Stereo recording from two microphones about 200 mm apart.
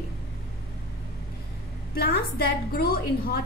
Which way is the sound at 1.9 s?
50° left (ahead or behind).